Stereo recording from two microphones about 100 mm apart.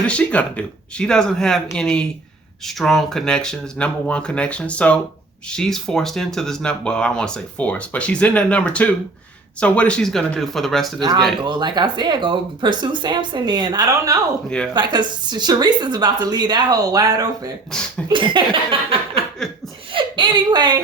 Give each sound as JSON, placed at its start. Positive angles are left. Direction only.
{"t": 0.1, "sound": "speech", "side_deg": 10}
{"t": 11.4, "sound": "speech", "side_deg": -50}
{"t": 14.7, "sound": "speech", "side_deg": -45}
{"t": 17.7, "sound": "speech", "side_deg": 5}
{"t": 18.1, "sound": "laughter", "side_deg": -55}
{"t": 19.4, "sound": "speech", "side_deg": 5}
{"t": 19.9, "sound": "speech", "side_deg": -55}